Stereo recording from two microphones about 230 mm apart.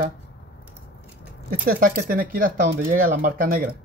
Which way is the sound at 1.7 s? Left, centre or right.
Right.